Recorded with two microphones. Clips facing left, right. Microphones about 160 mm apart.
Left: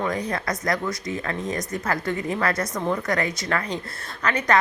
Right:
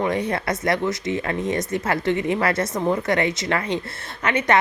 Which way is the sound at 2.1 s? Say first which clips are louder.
Right 5 dB; 90° right.